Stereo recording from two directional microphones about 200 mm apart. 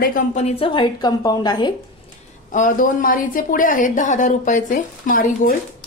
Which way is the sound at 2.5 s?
40° left (ahead or behind).